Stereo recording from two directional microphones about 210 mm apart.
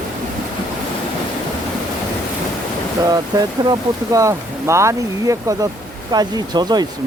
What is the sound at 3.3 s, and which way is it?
Speech, 20° right (ahead or behind).